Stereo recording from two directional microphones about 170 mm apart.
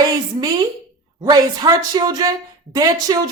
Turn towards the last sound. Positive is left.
turn(degrees=-20)  # may be behind; listen again after turning